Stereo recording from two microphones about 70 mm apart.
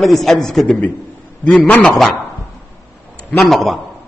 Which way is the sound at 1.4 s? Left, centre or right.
Left.